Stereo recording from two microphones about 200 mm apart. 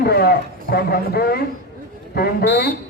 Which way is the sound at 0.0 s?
50° left (ahead or behind).